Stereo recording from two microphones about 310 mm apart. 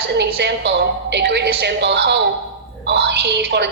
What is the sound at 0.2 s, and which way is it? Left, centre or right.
A woman's voice, right.